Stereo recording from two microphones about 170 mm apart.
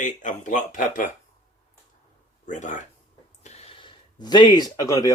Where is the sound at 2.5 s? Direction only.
45° left (ahead or behind).